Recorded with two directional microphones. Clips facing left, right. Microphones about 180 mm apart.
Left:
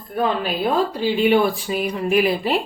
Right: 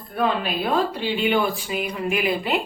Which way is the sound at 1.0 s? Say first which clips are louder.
Left 5 dB; 35° left (ahead or behind).